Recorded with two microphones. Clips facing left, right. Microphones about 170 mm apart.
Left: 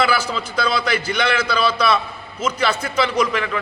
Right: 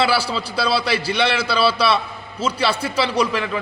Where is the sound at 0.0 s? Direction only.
30° right (ahead or behind).